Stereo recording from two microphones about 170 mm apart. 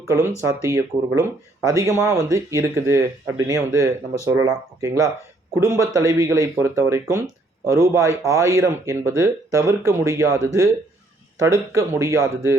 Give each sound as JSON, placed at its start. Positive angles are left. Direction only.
{"t": 0.1, "sound": "speech", "side_deg": -15}